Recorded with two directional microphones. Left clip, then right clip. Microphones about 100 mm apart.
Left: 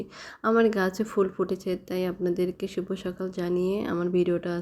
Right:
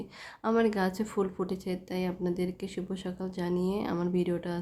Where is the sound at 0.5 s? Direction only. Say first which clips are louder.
Left 5 dB; 20° left (ahead or behind).